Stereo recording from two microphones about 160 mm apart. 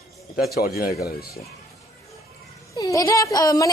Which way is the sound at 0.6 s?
75° left (ahead or behind).